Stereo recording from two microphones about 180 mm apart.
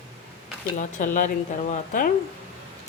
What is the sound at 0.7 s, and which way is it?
Speech, 45° left (ahead or behind).